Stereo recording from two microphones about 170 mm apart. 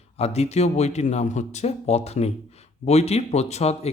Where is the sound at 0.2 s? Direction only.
40° left (ahead or behind).